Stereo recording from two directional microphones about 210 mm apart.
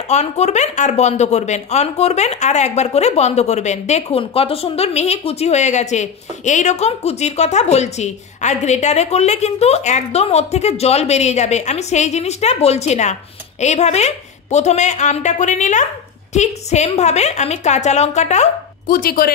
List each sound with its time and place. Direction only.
0.1 s speech: 30° left (ahead or behind)